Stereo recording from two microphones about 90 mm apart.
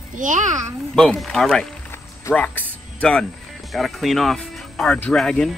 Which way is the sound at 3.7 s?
Centre (ahead or behind).